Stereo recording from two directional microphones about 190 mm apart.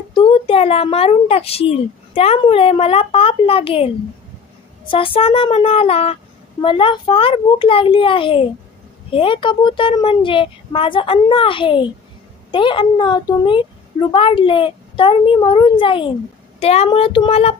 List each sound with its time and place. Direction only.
0.1 s a child's voice: 30° left (ahead or behind)